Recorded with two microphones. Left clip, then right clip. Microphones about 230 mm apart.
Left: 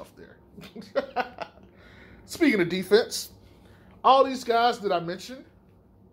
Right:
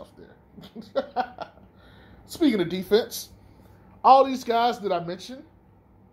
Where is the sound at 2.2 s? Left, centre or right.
Left.